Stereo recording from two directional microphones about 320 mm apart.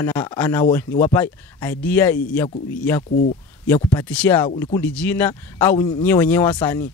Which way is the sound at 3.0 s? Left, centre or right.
Left.